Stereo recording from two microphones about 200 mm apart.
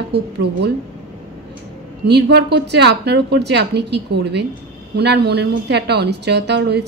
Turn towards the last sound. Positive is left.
turn(degrees=-60)  # may be behind; listen again after turning